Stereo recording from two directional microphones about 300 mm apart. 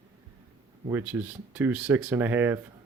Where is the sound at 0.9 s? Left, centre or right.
Centre.